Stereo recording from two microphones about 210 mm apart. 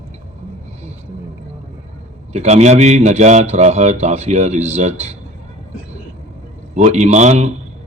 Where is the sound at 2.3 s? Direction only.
35° right (ahead or behind).